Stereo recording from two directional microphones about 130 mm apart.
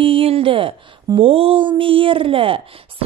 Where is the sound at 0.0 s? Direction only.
45° right (ahead or behind).